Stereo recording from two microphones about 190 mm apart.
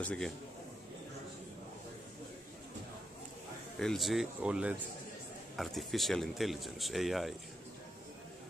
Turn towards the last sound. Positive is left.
turn(degrees=0)  # may be behind; listen again after turning